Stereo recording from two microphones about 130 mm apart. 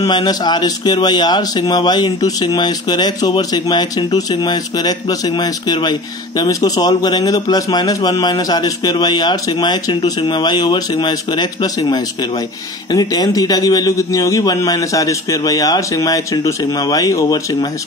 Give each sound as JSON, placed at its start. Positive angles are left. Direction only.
{"t": 0.0, "sound": "a man's voice", "side_deg": 30}